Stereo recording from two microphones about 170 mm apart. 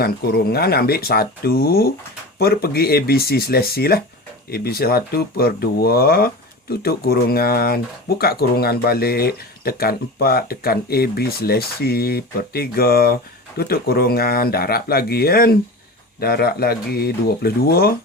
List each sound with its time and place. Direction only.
0.0 s speech: 65° left (ahead or behind)